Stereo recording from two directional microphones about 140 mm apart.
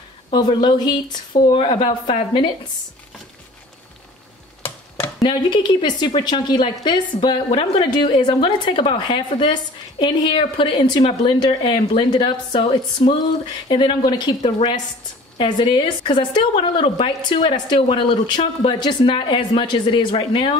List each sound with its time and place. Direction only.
0.3 s a woman's voice: 30° left (ahead or behind)
5.2 s a woman's voice: 35° left (ahead or behind)